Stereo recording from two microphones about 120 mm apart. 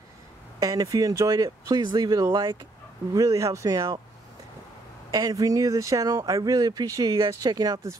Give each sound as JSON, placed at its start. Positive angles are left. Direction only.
{"t": 0.6, "sound": "speech", "side_deg": -30}
{"t": 5.1, "sound": "speech", "side_deg": -30}